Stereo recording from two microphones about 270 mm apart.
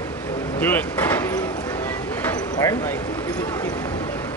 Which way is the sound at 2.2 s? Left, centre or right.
Centre.